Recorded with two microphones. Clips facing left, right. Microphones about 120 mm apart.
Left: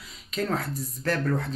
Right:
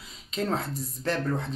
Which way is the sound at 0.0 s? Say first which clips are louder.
Left 1 dB; 25° right (ahead or behind).